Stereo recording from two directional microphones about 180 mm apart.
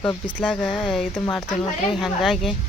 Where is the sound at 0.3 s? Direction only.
Centre (ahead or behind).